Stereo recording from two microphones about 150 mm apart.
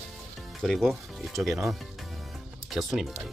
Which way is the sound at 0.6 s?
5° left (ahead or behind).